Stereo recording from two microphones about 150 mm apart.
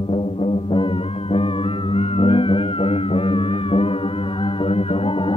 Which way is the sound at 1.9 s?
40° left (ahead or behind).